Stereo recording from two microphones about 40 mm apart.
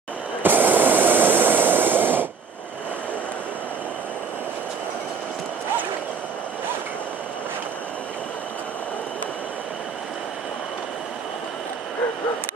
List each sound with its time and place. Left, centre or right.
0.4 s train: right